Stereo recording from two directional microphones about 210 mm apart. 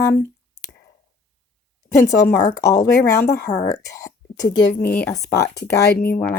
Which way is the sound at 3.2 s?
50° left (ahead or behind).